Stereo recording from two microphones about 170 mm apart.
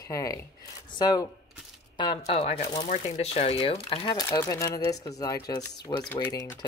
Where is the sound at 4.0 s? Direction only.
20° left (ahead or behind).